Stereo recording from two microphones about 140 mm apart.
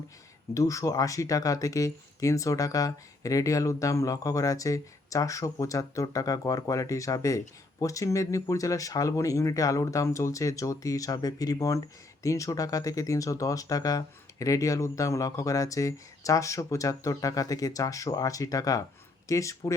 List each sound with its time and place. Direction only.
0.5 s speech: 25° left (ahead or behind)